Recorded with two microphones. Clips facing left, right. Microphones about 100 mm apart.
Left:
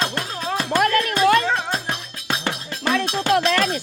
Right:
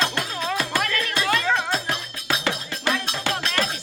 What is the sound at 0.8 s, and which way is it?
Music, 45° left (ahead or behind).